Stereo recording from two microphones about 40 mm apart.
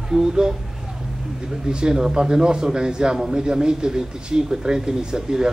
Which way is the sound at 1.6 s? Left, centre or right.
Right.